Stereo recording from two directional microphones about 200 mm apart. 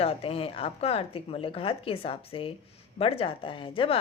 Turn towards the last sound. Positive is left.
turn(degrees=25)  # may be behind; listen again after turning